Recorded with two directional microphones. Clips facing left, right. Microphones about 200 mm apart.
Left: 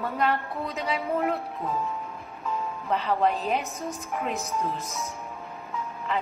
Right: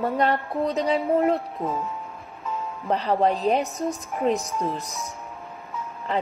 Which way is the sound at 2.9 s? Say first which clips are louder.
Right 3 dB; 35° right (ahead or behind).